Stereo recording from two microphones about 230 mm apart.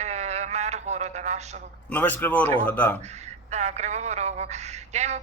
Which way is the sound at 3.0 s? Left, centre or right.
Right.